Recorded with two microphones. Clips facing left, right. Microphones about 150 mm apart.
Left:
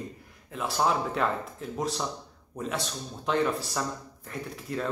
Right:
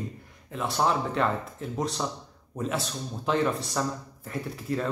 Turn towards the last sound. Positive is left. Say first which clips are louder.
# right 2 dB
turn(degrees=0)  # may be behind; listen again after turning